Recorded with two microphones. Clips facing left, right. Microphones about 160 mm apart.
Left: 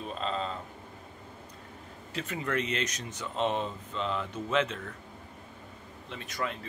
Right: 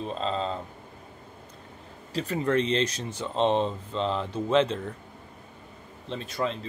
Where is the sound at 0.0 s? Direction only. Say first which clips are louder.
Right 4 dB; 30° right (ahead or behind).